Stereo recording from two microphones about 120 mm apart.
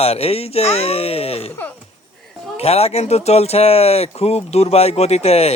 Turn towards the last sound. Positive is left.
turn(degrees=60)  # may be behind; listen again after turning